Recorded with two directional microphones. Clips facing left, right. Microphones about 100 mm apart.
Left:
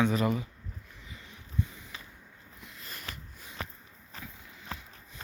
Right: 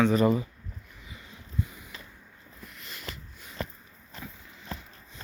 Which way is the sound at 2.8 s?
40° left (ahead or behind).